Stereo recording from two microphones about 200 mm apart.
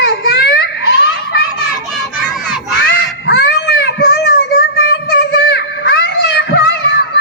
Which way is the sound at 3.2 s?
55° left (ahead or behind).